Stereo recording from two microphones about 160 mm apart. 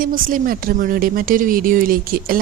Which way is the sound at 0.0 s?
60° right (ahead or behind).